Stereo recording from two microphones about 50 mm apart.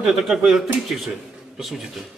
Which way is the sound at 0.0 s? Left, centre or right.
Centre.